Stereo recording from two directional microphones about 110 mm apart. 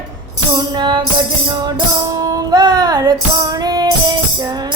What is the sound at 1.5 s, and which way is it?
Music, 35° right (ahead or behind).